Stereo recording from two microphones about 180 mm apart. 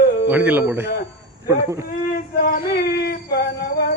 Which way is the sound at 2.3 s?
50° left (ahead or behind).